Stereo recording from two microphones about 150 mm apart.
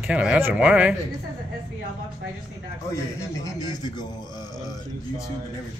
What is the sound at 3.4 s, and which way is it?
Speech, 25° left (ahead or behind).